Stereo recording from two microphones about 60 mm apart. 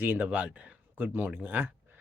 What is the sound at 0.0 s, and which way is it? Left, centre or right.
Speech, right.